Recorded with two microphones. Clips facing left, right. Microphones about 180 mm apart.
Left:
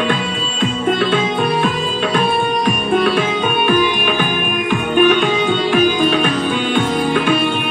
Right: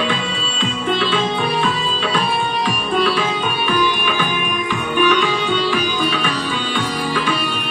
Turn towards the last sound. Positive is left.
turn(degrees=50)  # may be behind; listen again after turning